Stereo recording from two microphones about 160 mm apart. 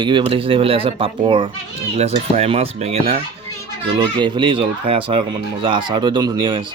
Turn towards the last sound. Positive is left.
turn(degrees=-30)  # may be behind; listen again after turning